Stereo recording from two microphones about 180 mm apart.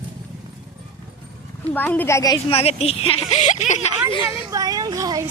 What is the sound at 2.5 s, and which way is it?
Speech, 35° left (ahead or behind).